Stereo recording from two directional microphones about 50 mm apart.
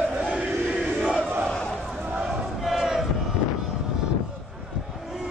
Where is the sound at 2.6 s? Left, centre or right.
Centre.